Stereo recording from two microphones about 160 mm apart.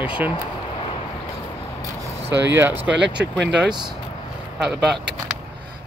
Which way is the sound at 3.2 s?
90° right.